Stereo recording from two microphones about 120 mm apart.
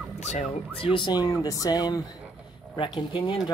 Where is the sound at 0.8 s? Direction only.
45° left (ahead or behind).